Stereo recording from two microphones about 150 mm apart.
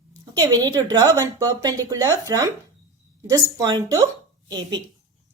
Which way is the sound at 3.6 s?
25° right (ahead or behind).